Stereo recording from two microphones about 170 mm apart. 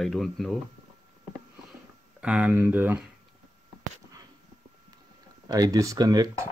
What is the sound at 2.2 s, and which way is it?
Speech, 5° right (ahead or behind).